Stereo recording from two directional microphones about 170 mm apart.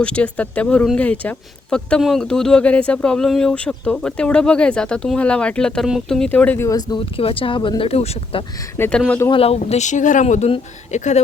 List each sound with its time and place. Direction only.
0.0 s speech: 5° left (ahead or behind); by 8.4 s 35° left (ahead or behind)
8.8 s speech: 5° left (ahead or behind)
9.3 s speech: 35° left (ahead or behind)